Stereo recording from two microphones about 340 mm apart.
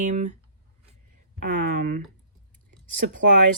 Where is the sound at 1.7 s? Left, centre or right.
Right.